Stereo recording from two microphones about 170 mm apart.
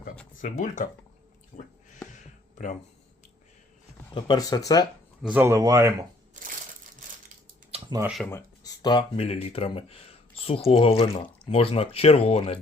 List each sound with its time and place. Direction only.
0.4 s speech: 45° left (ahead or behind)
4.1 s speech: 25° left (ahead or behind)
5.2 s speech: 10° right (ahead or behind)
7.7 s a sound: 25° right (ahead or behind)
8.0 s speech: centre (ahead or behind)
8.3 s speech: 20° left (ahead or behind); by 12.5 s 35° left (ahead or behind)